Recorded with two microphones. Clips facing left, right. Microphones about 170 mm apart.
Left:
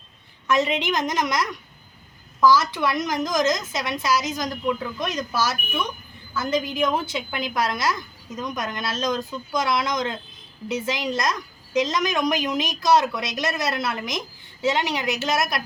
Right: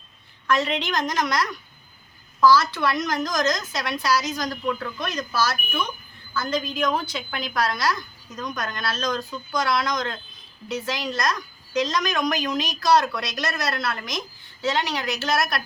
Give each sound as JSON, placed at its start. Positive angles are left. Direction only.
{"t": 0.5, "sound": "a woman's voice", "side_deg": 20}